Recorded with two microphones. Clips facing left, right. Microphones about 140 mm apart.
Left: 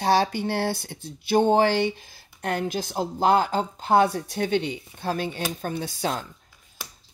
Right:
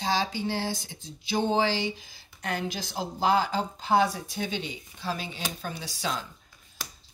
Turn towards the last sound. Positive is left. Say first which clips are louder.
# left 5 dB
turn(degrees=55)  # may be behind; listen again after turning